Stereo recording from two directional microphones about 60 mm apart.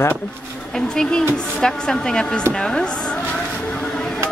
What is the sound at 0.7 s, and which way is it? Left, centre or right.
Speech, centre.